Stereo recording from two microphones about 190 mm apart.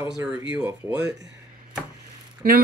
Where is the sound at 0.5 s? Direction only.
10° right (ahead or behind).